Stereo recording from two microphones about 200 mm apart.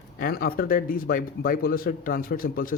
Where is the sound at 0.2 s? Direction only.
50° left (ahead or behind).